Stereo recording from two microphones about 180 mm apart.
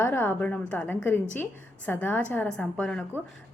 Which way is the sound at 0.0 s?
10° left (ahead or behind).